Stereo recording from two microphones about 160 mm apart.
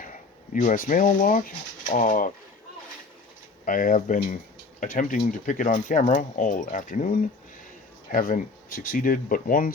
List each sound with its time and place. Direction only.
0.0 s speech: 55° left (ahead or behind)
3.7 s speech: 60° left (ahead or behind)